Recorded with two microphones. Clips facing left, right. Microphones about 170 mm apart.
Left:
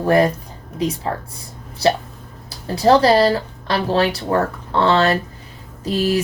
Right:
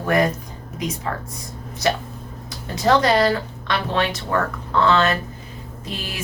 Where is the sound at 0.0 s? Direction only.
30° left (ahead or behind).